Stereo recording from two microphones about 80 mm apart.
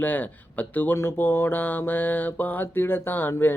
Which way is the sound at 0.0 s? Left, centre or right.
Left.